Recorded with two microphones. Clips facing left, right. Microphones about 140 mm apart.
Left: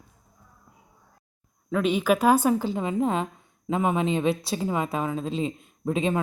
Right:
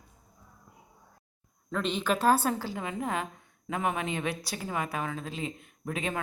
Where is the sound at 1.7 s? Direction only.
5° left (ahead or behind).